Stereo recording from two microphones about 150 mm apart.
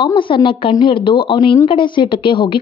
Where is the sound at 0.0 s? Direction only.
35° left (ahead or behind).